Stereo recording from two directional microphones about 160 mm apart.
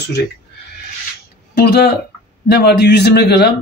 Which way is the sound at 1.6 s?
90° left.